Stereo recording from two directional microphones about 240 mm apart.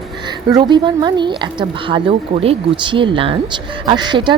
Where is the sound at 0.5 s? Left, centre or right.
Centre.